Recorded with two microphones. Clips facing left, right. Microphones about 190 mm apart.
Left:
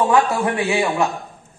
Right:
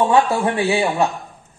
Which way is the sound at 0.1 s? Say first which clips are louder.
Right 1 dB; 30° right (ahead or behind).